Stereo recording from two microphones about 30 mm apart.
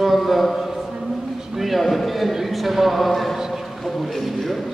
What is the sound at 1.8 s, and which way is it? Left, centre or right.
A man's voice, centre.